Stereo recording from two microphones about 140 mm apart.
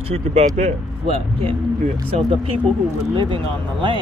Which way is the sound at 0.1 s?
50° right (ahead or behind).